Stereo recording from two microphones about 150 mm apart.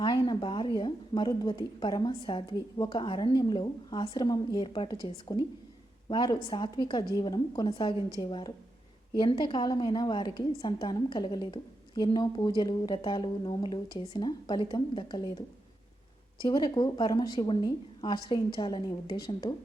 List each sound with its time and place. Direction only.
0.0 s a sound: 30° left (ahead or behind)
0.8 s a woman's voice: 30° left (ahead or behind)
16.4 s a woman's voice: 30° left (ahead or behind)